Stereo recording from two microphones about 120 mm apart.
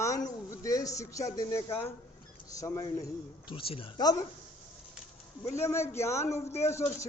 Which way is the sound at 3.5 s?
50° left (ahead or behind).